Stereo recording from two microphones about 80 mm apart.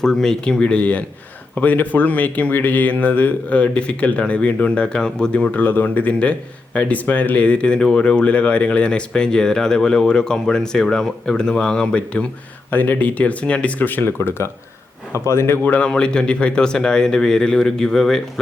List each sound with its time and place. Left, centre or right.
0.0 s speech: centre; by 15.5 s left
15.6 s speech: centre